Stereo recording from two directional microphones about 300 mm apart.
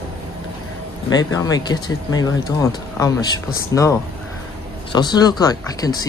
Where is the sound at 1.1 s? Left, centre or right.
Centre.